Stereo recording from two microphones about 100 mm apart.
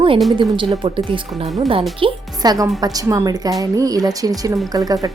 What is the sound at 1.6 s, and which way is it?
Speech, 65° right (ahead or behind).